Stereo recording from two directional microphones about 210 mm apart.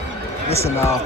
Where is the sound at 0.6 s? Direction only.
10° left (ahead or behind).